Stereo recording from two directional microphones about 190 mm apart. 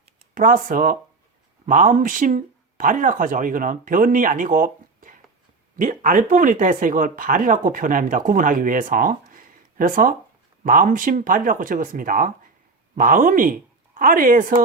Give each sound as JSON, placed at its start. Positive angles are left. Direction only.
{"t": 0.3, "sound": "speech", "side_deg": -45}